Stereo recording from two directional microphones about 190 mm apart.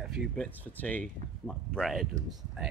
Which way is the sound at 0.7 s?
5° left (ahead or behind).